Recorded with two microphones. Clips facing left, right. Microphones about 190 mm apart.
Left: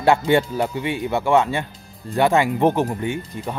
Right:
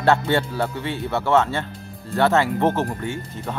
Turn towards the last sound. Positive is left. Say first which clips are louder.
# left 3 dB
turn(degrees=15)  # may be behind; listen again after turning